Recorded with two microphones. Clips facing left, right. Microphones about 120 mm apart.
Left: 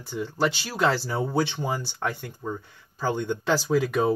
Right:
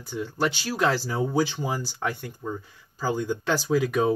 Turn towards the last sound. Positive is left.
turn(degrees=0)  # may be behind; listen again after turning